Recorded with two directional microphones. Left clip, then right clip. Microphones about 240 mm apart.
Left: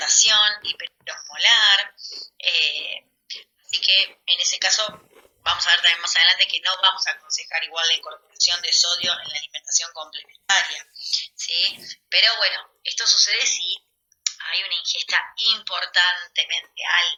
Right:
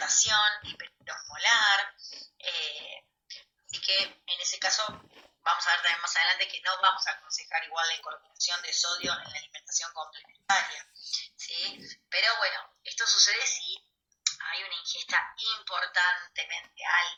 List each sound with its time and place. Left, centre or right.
0.1 s speech: left
2.4 s a sound: left
5.4 s speech: left